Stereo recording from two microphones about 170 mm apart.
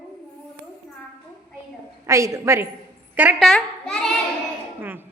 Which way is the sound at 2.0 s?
15° right (ahead or behind).